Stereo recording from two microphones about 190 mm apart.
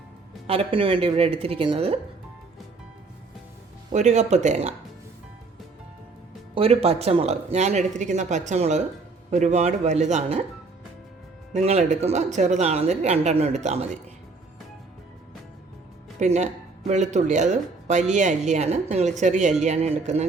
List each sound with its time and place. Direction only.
0.4 s speech: 30° right (ahead or behind)
3.9 s speech: 40° right (ahead or behind)
6.5 s speech: 30° right (ahead or behind)
11.5 s speech: 35° right (ahead or behind)
16.2 s speech: 35° right (ahead or behind)